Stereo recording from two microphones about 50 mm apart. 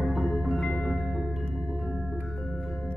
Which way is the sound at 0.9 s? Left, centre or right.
Centre.